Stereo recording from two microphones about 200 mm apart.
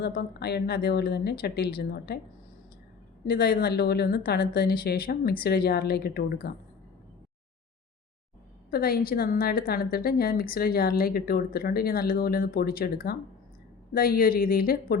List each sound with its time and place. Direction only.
0.0 s a woman's voice: 50° left (ahead or behind)
3.2 s a woman's voice: 50° left (ahead or behind)
8.7 s a woman's voice: 50° left (ahead or behind)